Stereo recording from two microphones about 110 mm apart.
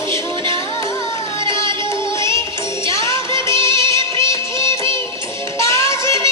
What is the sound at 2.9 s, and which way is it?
Music, 30° left (ahead or behind).